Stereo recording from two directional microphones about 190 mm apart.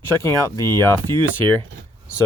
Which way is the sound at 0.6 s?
20° right (ahead or behind).